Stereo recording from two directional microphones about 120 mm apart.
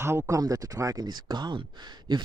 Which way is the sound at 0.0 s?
25° right (ahead or behind).